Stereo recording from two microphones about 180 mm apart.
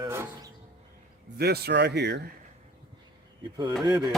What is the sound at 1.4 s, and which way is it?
Speech, 65° right (ahead or behind).